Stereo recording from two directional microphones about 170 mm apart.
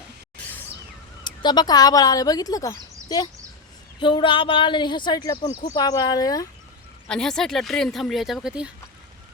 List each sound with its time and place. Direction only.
1.2 s speech: 25° left (ahead or behind)
4.0 s speech: 30° left (ahead or behind)
7.1 s speech: 5° left (ahead or behind)